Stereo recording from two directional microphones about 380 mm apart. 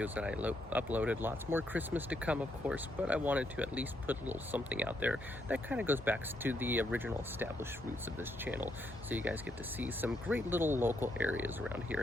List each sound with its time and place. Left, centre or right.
0.0 s speech: centre